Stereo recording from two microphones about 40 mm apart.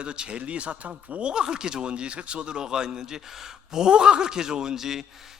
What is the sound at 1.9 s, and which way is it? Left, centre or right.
A man's voice, right.